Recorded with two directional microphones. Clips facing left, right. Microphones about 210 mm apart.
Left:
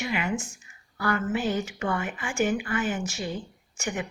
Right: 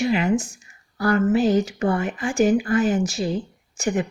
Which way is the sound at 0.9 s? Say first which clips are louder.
Right 8 dB; 40° right (ahead or behind).